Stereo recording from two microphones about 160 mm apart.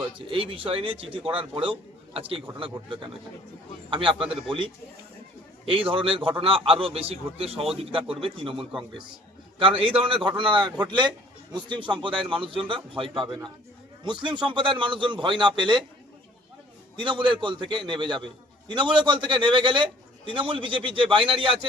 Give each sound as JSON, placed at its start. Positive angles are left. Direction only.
{"t": 0.3, "sound": "a man's voice", "side_deg": -35}
{"t": 3.8, "sound": "a man's voice", "side_deg": -30}
{"t": 5.9, "sound": "a man's voice", "side_deg": -35}
{"t": 17.0, "sound": "a man's voice", "side_deg": -30}